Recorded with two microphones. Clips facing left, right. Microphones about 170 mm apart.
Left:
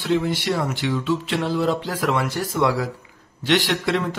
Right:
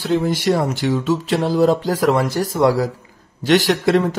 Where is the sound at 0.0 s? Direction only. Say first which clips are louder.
Right 4 dB; 40° right (ahead or behind).